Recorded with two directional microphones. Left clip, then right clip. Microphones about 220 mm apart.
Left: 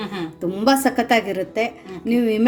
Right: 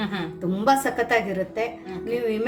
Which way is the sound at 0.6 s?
40° left (ahead or behind).